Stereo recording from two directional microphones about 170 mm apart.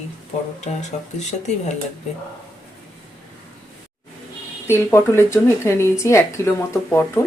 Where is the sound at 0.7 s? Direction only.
40° left (ahead or behind).